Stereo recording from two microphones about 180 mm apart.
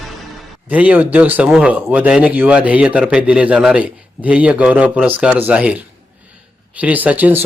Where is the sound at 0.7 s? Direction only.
10° right (ahead or behind).